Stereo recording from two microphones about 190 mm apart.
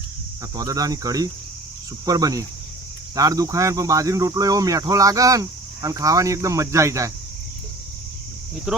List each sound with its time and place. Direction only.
0.5 s speech: 20° right (ahead or behind)